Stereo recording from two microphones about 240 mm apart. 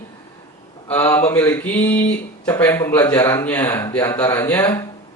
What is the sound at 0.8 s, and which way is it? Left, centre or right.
Speech, centre.